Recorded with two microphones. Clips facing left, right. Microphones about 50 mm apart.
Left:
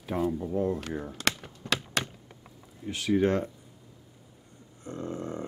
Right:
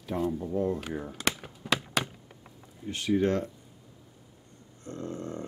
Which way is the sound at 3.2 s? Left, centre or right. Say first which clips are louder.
Left 2 dB; centre.